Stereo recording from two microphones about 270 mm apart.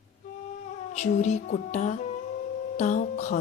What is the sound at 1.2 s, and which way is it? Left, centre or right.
Music, left.